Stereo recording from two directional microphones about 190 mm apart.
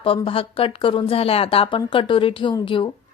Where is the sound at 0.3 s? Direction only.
30° left (ahead or behind).